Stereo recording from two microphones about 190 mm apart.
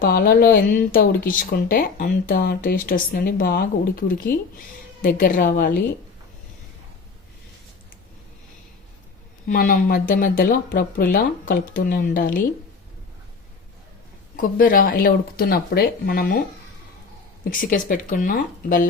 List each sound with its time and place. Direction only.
0.0 s speech: 50° left (ahead or behind)
5.0 s speech: 50° left (ahead or behind)
9.5 s speech: 50° left (ahead or behind)
14.3 s speech: 45° left (ahead or behind)
17.6 s speech: 45° left (ahead or behind)